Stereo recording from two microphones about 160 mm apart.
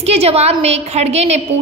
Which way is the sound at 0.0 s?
40° right (ahead or behind).